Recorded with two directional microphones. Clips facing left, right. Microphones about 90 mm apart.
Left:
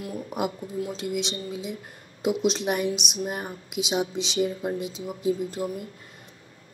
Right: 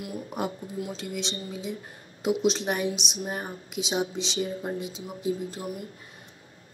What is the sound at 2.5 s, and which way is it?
Speech, 35° right (ahead or behind).